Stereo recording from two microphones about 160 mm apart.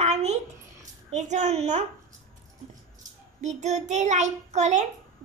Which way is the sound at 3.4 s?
45° right (ahead or behind).